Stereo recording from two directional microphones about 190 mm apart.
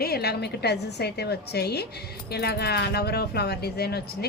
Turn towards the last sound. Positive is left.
turn(degrees=55)  # may be behind; listen again after turning